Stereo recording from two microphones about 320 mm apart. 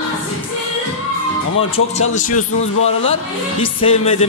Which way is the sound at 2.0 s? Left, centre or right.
Left.